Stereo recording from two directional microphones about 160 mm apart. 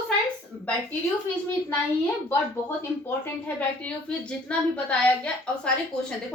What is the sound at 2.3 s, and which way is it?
A woman's voice, 15° left (ahead or behind).